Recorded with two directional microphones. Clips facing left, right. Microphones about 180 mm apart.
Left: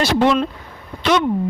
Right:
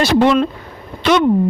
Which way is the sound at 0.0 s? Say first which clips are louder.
Right 3 dB; 60° right (ahead or behind).